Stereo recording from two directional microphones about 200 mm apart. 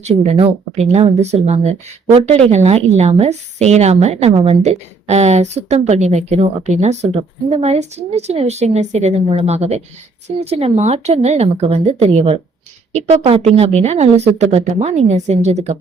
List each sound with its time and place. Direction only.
0.0 s speech: 30° right (ahead or behind)